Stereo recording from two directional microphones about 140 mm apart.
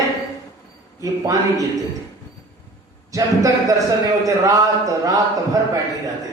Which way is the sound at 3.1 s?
25° right (ahead or behind).